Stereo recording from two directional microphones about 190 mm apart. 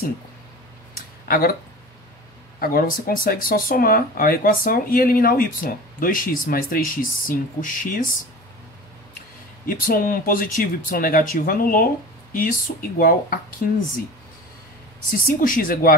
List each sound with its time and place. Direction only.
1.2 s speech: 50° left (ahead or behind)
2.6 s speech: 50° left (ahead or behind)
9.7 s speech: 50° left (ahead or behind)
15.2 s speech: 45° left (ahead or behind)